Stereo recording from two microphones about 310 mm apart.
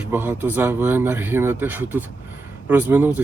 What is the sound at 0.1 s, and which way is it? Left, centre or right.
Speech, centre.